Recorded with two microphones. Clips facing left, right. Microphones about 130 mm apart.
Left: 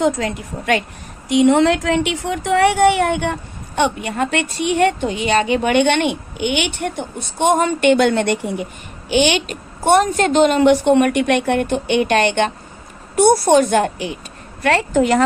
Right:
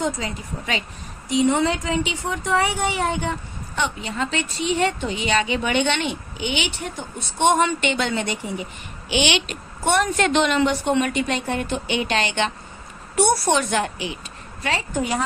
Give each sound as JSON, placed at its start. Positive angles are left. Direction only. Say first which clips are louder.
{"t": 0.0, "sound": "a woman's voice", "louder": "left 7 dB", "side_deg": 70}
{"t": 9.0, "sound": "a woman's voice", "louder": "left 6 dB", "side_deg": 50}
{"t": 10.7, "sound": "a woman's voice", "louder": "left 9 dB", "side_deg": 60}
{"t": 14.6, "sound": "speech", "louder": "left 9 dB", "side_deg": 65}